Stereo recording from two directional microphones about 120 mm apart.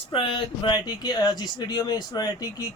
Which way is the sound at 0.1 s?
45° left (ahead or behind).